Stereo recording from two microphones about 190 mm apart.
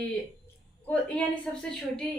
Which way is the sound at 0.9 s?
5° left (ahead or behind).